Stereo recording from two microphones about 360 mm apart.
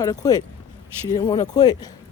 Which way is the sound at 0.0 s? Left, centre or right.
Centre.